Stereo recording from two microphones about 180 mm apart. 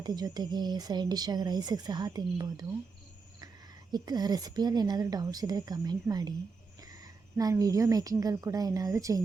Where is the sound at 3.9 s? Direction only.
20° right (ahead or behind).